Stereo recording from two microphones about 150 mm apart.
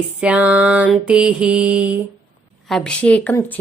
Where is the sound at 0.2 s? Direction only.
10° right (ahead or behind).